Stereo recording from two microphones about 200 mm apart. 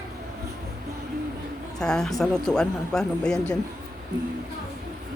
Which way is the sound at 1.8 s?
5° left (ahead or behind).